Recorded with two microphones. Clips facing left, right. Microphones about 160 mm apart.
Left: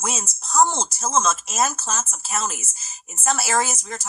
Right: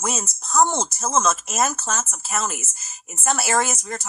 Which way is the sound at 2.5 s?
50° right (ahead or behind).